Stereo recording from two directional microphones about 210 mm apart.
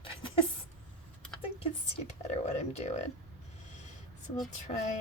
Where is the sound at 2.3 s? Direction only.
30° left (ahead or behind).